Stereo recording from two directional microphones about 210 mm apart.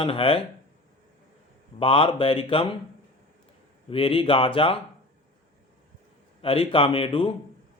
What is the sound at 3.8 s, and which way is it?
Speech, 25° left (ahead or behind).